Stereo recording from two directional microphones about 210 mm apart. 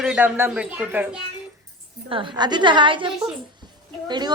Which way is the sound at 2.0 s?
25° right (ahead or behind).